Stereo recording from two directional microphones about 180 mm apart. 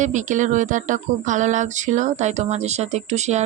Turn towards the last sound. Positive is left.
turn(degrees=-40)  # may be behind; listen again after turning